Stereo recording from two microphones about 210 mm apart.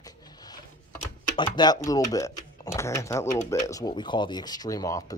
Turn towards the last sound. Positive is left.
turn(degrees=15)  # may be behind; listen again after turning